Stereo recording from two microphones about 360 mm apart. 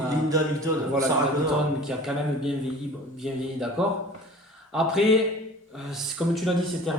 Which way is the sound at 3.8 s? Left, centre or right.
Centre.